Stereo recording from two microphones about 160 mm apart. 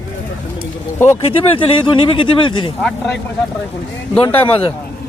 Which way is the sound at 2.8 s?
5° left (ahead or behind).